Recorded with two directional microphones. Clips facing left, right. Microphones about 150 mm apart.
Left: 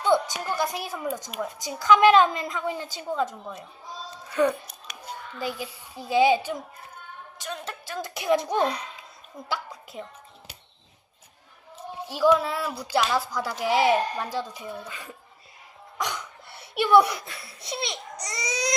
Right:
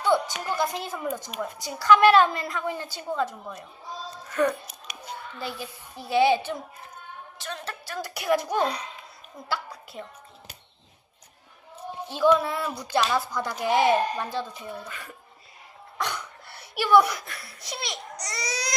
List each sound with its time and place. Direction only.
0.0 s music: 15° left (ahead or behind)
0.3 s speech: 10° left (ahead or behind)
8.0 s a child's voice: 20° left (ahead or behind)
9.5 s a sound: 20° left (ahead or behind)
12.0 s speech: 10° left (ahead or behind)
16.0 s a sound: 15° left (ahead or behind)